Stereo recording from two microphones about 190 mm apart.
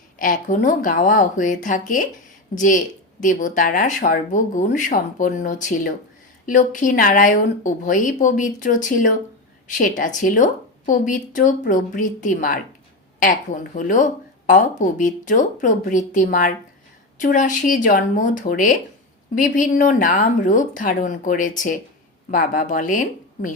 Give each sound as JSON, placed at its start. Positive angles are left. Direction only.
{"t": 0.2, "sound": "speech", "side_deg": 45}